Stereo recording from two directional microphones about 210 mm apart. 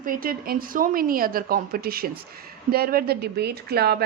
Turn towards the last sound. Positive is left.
turn(degrees=-50)  # may be behind; listen again after turning